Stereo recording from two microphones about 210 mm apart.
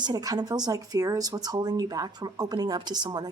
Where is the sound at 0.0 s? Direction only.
20° right (ahead or behind).